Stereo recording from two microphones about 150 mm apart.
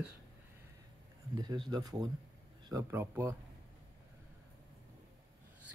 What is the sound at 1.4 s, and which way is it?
Speech, 25° right (ahead or behind).